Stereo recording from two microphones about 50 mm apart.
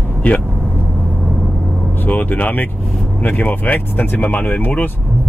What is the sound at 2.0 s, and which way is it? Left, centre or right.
Speech, left.